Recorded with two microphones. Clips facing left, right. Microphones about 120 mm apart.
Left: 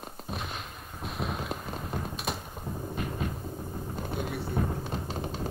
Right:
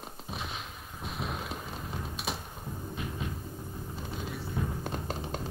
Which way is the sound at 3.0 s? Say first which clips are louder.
Left 4 dB; 50° left (ahead or behind).